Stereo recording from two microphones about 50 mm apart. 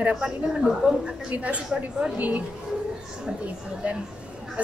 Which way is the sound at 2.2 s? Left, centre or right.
Right.